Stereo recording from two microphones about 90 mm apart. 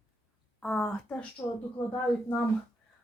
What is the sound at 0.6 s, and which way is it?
Speech, 10° left (ahead or behind).